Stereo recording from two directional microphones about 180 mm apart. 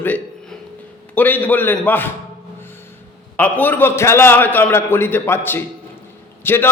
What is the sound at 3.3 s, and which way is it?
A man's voice, 10° left (ahead or behind).